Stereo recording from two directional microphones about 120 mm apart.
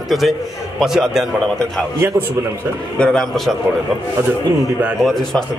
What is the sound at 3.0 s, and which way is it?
Speech, 5° left (ahead or behind).